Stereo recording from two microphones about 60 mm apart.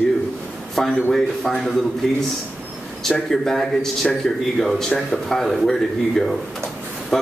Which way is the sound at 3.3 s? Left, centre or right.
Centre.